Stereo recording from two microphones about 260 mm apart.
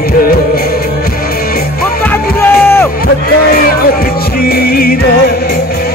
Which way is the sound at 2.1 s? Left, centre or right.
Centre.